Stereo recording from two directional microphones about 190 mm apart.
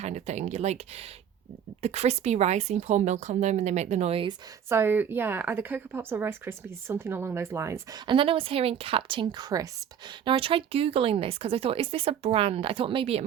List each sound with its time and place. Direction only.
0.0 s speech: 35° right (ahead or behind)
1.8 s speech: 35° right (ahead or behind)
4.7 s speech: 10° right (ahead or behind)
8.0 s speech: 25° right (ahead or behind)